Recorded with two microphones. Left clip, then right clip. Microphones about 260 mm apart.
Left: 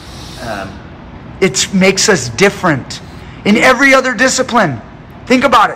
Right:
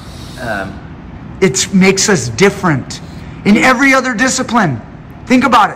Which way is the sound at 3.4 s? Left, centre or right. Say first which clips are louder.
Left 1 dB; centre.